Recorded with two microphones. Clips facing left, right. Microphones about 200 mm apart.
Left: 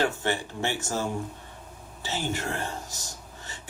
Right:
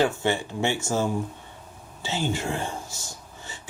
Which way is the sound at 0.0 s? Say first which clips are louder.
Right 4 dB; 15° right (ahead or behind).